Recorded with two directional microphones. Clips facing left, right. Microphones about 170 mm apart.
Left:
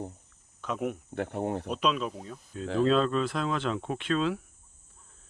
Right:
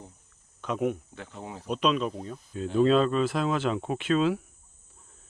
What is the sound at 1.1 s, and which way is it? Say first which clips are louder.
Speech: left 10 dB; 60° left (ahead or behind).